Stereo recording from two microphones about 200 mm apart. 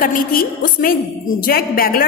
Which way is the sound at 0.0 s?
45° left (ahead or behind).